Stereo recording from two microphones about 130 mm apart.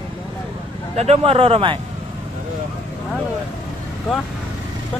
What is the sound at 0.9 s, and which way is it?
Speech, 50° right (ahead or behind).